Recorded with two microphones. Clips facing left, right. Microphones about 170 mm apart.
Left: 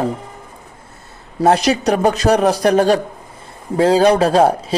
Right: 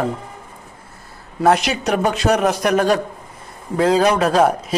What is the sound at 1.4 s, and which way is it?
Speech, 35° left (ahead or behind).